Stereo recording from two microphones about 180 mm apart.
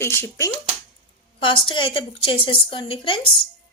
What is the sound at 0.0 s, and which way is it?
Speech, 15° left (ahead or behind).